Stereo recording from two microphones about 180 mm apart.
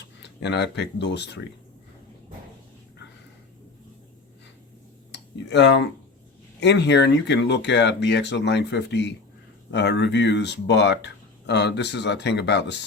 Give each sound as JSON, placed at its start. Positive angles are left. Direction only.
{"t": 0.0, "sound": "speech", "side_deg": 70}
{"t": 5.1, "sound": "speech", "side_deg": 70}